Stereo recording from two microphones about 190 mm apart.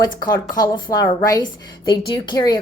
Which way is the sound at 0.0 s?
20° left (ahead or behind).